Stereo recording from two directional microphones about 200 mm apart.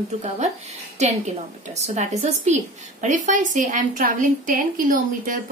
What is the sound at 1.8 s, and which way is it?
A woman's voice, 35° right (ahead or behind).